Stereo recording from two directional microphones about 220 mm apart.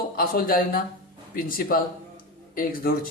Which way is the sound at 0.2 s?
40° left (ahead or behind).